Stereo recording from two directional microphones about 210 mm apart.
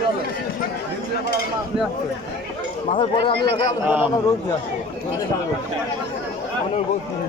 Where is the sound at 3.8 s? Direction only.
5° right (ahead or behind).